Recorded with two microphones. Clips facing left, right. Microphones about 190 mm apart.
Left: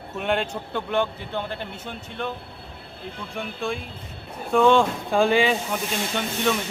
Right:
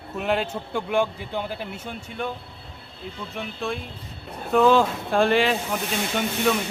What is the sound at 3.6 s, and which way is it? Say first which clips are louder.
A man's voice: even; centre (ahead or behind).